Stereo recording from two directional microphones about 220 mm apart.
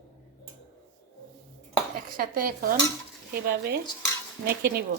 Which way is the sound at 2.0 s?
40° right (ahead or behind).